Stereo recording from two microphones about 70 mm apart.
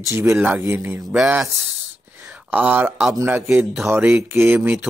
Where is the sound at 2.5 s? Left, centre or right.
Right.